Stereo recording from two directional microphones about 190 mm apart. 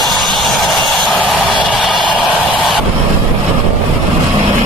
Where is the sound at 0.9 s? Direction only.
Centre (ahead or behind).